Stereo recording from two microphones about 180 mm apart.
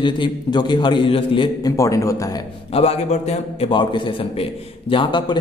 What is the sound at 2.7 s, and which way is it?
A man's voice, 35° left (ahead or behind).